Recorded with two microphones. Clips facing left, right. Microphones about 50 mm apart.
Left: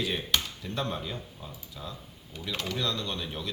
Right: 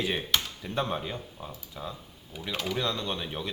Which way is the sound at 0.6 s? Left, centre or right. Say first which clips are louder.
Right 2 dB; centre.